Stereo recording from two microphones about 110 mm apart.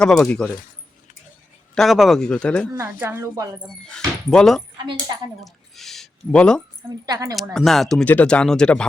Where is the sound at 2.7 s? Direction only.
25° right (ahead or behind).